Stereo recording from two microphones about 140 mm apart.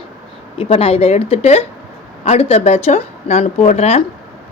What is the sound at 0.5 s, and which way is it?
Speech, 45° left (ahead or behind).